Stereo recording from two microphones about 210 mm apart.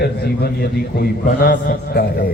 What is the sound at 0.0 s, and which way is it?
A man's voice, 45° left (ahead or behind).